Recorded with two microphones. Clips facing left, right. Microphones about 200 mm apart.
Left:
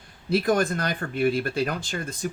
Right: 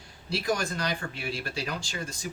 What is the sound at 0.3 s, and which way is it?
Speech, 55° left (ahead or behind).